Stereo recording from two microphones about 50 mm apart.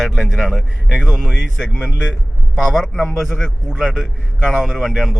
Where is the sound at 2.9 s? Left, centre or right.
Centre.